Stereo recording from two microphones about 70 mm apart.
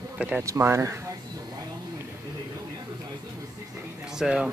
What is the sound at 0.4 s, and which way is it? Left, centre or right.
Speech, right.